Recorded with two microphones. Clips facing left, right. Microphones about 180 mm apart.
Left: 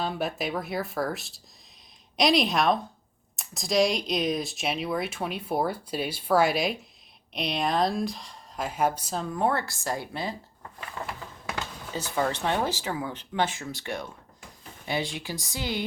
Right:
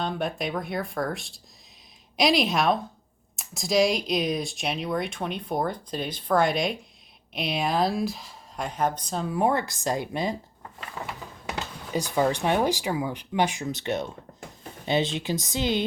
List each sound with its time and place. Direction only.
0.0 s speech: 5° left (ahead or behind)
9.2 s speech: 10° right (ahead or behind)
11.4 s speech: 20° right (ahead or behind)